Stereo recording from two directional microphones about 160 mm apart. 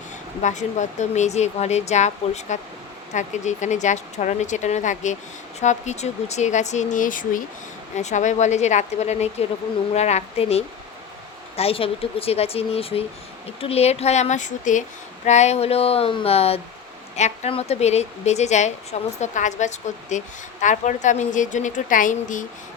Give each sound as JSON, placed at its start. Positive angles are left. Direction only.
{"t": 0.4, "sound": "a woman's voice", "side_deg": 50}